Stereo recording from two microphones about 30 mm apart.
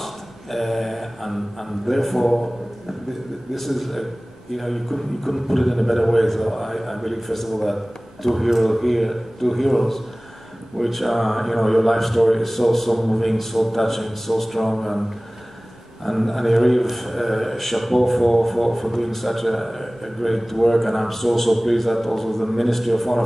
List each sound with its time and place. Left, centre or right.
0.0 s speech: centre
3.5 s speech: centre
16.1 s speech: centre